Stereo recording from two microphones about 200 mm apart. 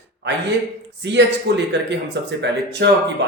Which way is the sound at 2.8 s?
55° right (ahead or behind).